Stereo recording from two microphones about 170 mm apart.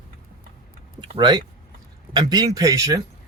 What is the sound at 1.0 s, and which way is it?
Speech, 25° right (ahead or behind).